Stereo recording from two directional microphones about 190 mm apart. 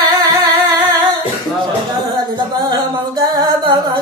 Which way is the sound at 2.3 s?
20° right (ahead or behind).